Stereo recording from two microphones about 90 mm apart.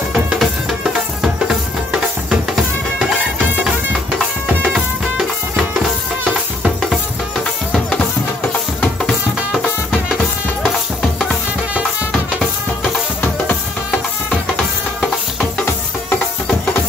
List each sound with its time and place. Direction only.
0.1 s music: centre (ahead or behind)
4.6 s music: centre (ahead or behind)
8.8 s music: 10° left (ahead or behind)
15.6 s music: 25° left (ahead or behind)